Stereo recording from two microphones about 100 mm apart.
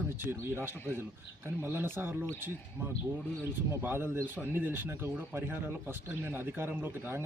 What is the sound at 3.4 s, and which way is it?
Speech, 25° right (ahead or behind).